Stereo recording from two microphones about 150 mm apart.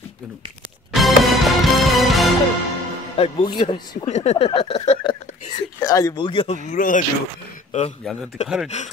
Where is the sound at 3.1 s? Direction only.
35° left (ahead or behind).